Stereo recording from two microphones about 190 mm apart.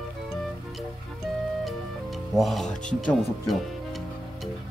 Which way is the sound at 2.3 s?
Centre (ahead or behind).